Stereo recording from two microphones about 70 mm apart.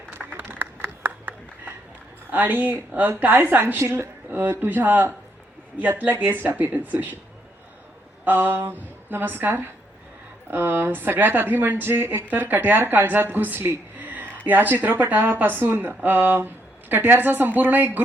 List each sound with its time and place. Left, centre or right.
0.3 s a sound: right
2.3 s a woman's voice: right
8.2 s a woman's voice: right